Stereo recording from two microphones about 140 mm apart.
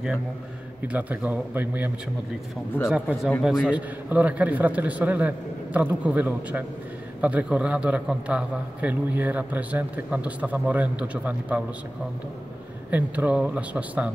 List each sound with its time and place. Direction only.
0.9 s a man's voice: 10° right (ahead or behind)
2.9 s a man's voice: 5° right (ahead or behind)
12.9 s a man's voice: 10° right (ahead or behind)